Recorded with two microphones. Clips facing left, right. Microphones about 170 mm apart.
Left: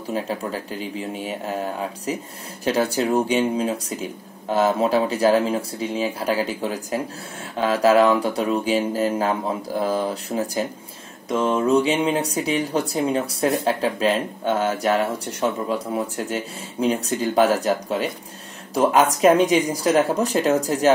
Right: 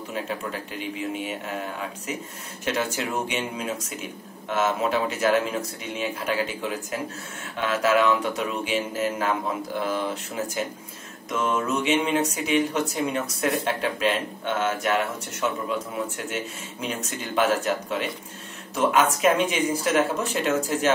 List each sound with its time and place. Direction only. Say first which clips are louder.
0.1 s speech: left 5 dB; 35° left (ahead or behind)